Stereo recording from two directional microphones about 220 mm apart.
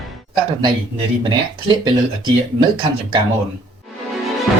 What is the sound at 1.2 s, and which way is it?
Speech, 20° right (ahead or behind).